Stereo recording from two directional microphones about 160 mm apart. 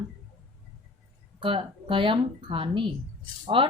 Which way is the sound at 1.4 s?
30° right (ahead or behind).